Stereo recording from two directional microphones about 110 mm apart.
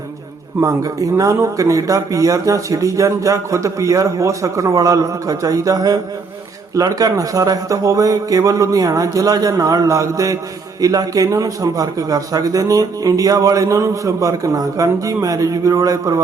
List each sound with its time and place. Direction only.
0.6 s a man's voice: 30° right (ahead or behind)